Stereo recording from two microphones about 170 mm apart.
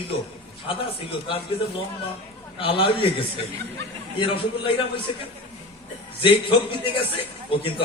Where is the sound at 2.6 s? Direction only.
30° left (ahead or behind).